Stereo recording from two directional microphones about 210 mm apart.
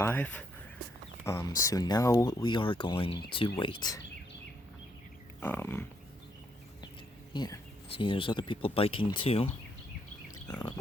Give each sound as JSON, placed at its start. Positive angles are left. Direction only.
{"t": 0.0, "sound": "speech", "side_deg": 10}
{"t": 5.4, "sound": "pig", "side_deg": 10}
{"t": 7.3, "sound": "speech", "side_deg": 20}
{"t": 10.3, "sound": "a sound", "side_deg": 20}